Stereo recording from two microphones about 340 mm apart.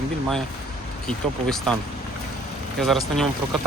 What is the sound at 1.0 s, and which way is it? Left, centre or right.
Speech, centre.